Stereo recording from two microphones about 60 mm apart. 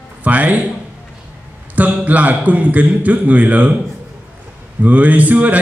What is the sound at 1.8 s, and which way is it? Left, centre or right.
A man's voice, right.